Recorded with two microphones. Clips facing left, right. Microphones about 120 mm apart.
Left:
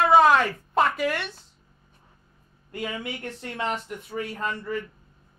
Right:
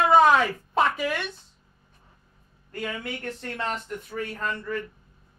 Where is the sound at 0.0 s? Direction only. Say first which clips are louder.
Even; centre (ahead or behind).